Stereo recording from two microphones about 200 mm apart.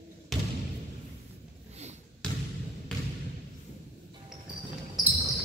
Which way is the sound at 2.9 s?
5° left (ahead or behind).